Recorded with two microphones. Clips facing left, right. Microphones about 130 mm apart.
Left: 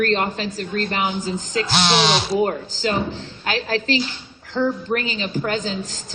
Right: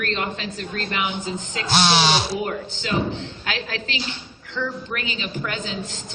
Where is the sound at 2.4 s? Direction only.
35° left (ahead or behind).